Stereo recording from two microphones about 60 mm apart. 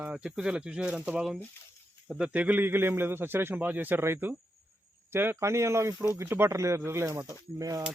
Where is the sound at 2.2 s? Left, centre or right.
Right.